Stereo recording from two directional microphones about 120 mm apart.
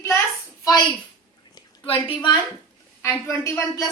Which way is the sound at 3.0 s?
20° left (ahead or behind).